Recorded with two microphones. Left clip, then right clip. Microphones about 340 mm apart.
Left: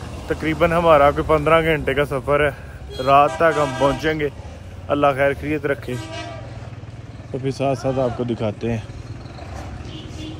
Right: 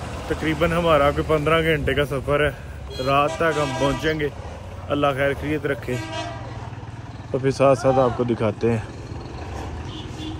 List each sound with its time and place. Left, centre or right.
0.3 s speech: centre
7.4 s speech: centre